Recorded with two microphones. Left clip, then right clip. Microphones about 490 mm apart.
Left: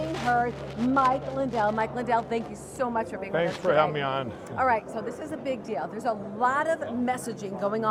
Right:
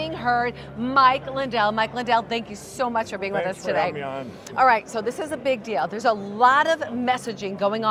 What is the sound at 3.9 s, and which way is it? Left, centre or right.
Speech, left.